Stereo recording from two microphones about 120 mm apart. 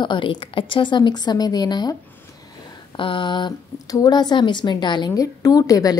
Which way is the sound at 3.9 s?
35° left (ahead or behind).